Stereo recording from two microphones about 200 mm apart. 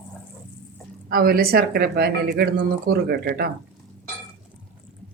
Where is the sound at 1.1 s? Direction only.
50° right (ahead or behind).